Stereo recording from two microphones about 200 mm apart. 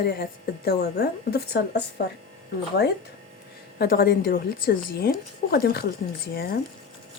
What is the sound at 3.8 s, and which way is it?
Speech, 50° left (ahead or behind).